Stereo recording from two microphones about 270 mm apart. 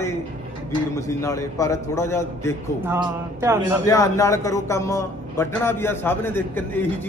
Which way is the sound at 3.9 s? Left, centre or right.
Centre.